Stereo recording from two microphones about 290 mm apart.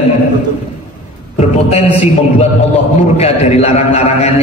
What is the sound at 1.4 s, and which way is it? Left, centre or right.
A man's voice, left.